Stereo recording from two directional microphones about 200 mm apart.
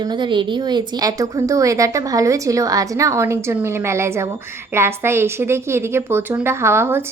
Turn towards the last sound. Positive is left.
turn(degrees=-10)  # may be behind; listen again after turning